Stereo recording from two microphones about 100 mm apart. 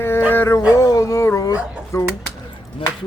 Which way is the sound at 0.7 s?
35° left (ahead or behind).